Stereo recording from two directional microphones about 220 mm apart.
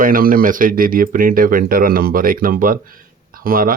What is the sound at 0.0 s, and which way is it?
Speech, 40° right (ahead or behind).